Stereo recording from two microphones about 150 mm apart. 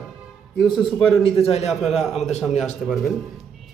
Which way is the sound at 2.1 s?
50° left (ahead or behind).